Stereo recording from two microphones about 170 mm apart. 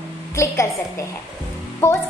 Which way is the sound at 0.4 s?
15° left (ahead or behind).